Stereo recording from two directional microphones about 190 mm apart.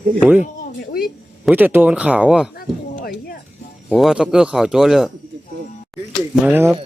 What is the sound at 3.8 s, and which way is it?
Speech, centre (ahead or behind).